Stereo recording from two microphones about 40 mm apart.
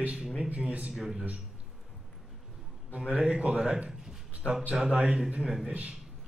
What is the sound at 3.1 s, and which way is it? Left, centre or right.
Speech, right.